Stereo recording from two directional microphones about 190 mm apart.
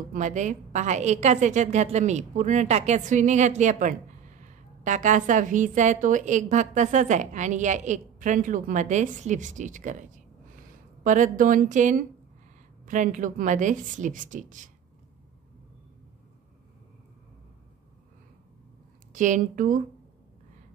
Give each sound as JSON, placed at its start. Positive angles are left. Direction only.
{"t": 0.1, "sound": "a woman's voice", "side_deg": -40}
{"t": 19.1, "sound": "a woman's voice", "side_deg": -40}